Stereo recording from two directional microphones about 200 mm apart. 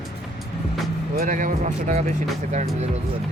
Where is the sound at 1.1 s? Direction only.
45° right (ahead or behind).